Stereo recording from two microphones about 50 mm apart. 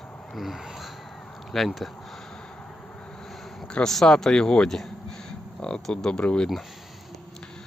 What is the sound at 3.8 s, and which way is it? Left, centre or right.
Speech, centre.